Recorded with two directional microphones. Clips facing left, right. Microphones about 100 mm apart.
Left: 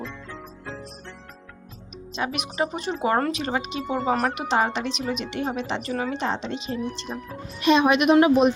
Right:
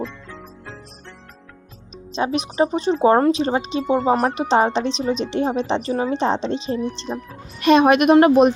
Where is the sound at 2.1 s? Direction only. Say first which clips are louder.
Right 7 dB; 30° right (ahead or behind).